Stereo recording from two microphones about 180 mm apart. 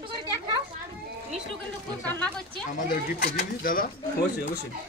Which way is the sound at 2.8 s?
55° left (ahead or behind).